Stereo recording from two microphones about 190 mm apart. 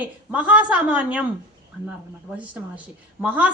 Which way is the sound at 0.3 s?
5° right (ahead or behind).